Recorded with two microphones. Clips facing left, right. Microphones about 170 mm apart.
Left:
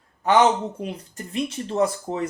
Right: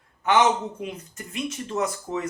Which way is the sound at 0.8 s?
35° left (ahead or behind).